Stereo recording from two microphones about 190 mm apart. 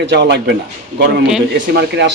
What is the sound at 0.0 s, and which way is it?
Speech, 65° right (ahead or behind).